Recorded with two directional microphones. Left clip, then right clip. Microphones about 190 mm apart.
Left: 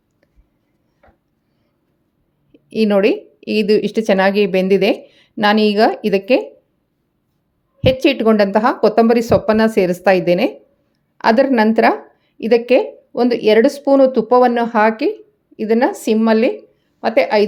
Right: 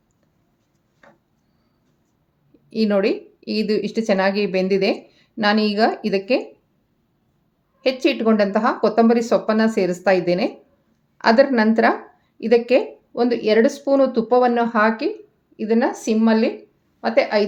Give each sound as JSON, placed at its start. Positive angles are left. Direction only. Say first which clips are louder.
{"t": 2.5, "sound": "a woman's voice", "louder": "left 5 dB", "side_deg": 35}
{"t": 7.8, "sound": "a woman's voice", "louder": "left 5 dB", "side_deg": 35}